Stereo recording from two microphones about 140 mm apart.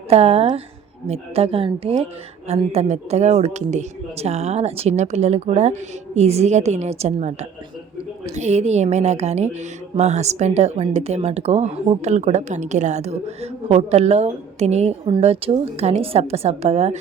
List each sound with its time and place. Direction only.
0.1 s speech: 45° right (ahead or behind)